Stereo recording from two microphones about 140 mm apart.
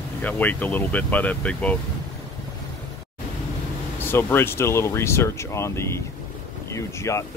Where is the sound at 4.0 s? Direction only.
15° left (ahead or behind).